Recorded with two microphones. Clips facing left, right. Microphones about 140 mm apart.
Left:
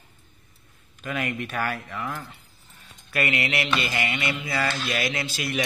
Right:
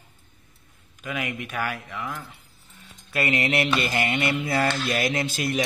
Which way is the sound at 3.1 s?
35° right (ahead or behind).